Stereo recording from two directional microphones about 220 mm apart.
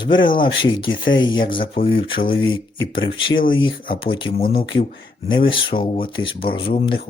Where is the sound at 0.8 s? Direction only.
60° left (ahead or behind).